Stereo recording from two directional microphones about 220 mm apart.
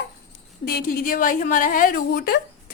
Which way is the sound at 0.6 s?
45° left (ahead or behind).